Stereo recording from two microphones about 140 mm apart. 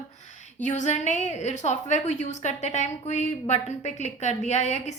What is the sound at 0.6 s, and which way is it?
A woman's voice, 55° left (ahead or behind).